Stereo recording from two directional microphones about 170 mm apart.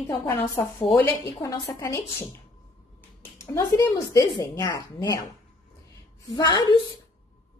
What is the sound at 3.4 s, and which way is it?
Speech, 15° left (ahead or behind).